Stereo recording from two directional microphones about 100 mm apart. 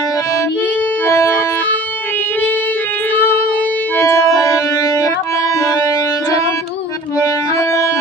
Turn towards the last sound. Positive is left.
turn(degrees=40)  # may be behind; listen again after turning